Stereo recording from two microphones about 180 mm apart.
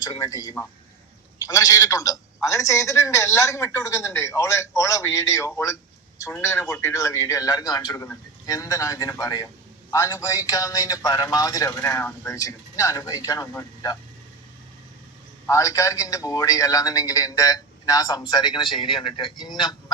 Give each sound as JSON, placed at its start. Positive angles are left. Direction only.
{"t": 0.0, "sound": "a man's voice", "side_deg": 20}
{"t": 15.4, "sound": "a man's voice", "side_deg": 20}